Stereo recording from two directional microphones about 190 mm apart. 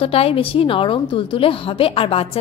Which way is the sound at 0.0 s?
30° left (ahead or behind).